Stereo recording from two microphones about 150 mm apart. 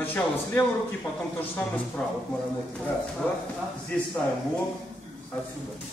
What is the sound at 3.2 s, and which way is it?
Speech, 10° left (ahead or behind).